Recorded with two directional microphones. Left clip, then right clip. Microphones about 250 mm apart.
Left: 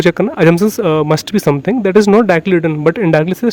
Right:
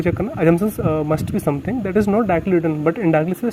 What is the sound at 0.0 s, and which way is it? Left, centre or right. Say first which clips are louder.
A man's voice: left 8 dB; left.